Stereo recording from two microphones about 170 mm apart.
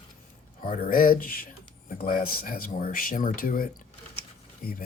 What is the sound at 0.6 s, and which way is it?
Speech, 50° left (ahead or behind).